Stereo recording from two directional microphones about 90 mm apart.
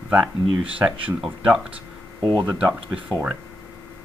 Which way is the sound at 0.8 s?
25° right (ahead or behind).